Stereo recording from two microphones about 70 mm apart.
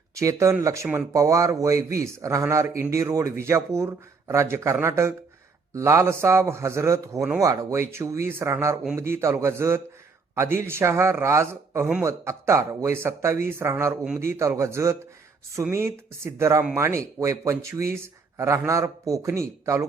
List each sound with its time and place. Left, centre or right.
0.2 s a man's voice: right